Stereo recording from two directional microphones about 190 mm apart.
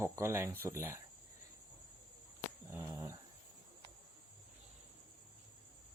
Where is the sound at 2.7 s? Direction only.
15° right (ahead or behind).